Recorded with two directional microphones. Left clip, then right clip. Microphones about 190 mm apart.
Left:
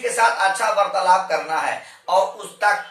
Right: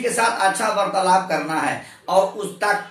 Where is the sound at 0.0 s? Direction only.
10° right (ahead or behind).